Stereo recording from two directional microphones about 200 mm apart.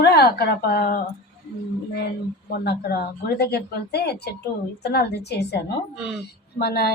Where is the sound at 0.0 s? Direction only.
55° left (ahead or behind).